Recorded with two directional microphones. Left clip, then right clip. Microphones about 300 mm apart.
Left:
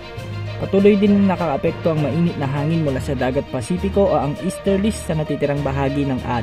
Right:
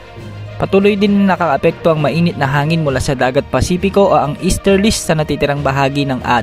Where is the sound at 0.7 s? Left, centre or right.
Right.